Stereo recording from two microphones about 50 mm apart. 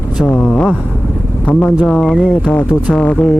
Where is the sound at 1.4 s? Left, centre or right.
Centre.